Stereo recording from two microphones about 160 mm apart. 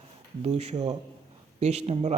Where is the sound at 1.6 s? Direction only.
40° right (ahead or behind).